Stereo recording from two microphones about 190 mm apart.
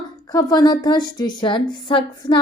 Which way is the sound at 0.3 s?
20° left (ahead or behind).